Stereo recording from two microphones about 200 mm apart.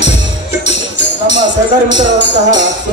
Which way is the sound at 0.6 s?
60° left (ahead or behind).